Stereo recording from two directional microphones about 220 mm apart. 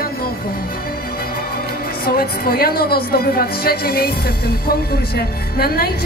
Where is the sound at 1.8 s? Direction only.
40° left (ahead or behind).